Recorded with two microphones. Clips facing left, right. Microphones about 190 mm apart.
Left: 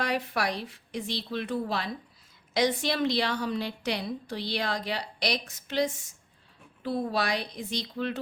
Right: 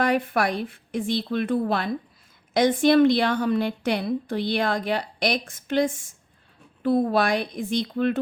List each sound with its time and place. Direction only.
0.0 s a woman's voice: 55° right (ahead or behind)